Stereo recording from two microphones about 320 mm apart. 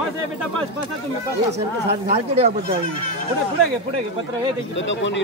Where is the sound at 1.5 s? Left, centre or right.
Centre.